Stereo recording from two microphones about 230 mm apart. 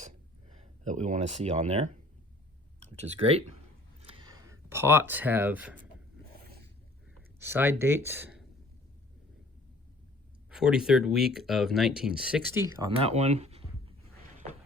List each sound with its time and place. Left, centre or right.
0.0 s a sound: right
2.8 s speech: right; by 5.7 s centre
7.4 s speech: centre
10.5 s speech: centre
12.6 s speech: centre